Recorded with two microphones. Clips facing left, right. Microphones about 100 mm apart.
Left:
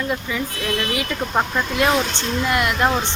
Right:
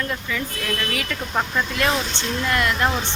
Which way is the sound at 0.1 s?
20° left (ahead or behind).